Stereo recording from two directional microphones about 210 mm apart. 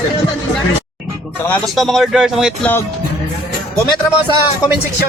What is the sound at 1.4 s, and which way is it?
Speech, 5° left (ahead or behind).